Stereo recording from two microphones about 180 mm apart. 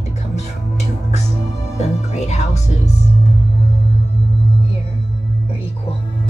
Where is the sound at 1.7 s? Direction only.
40° left (ahead or behind).